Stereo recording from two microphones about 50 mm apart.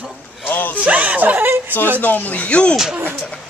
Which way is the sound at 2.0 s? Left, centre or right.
Left.